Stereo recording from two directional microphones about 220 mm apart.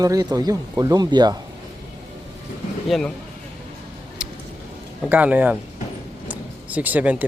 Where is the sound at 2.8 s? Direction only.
Centre (ahead or behind).